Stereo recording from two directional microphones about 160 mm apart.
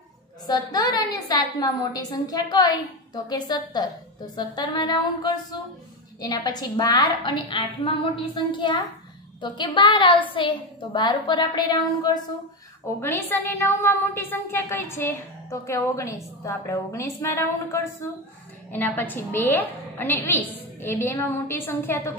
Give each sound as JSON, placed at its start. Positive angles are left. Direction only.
{"t": 0.5, "sound": "a woman's voice", "side_deg": 25}
{"t": 13.0, "sound": "a woman's voice", "side_deg": 15}